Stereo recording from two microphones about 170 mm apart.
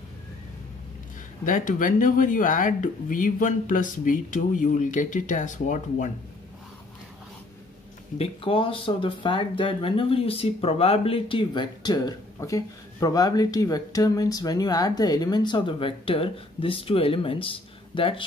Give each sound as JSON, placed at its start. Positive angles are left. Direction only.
{"t": 1.4, "sound": "speech", "side_deg": 50}
{"t": 8.2, "sound": "speech", "side_deg": 30}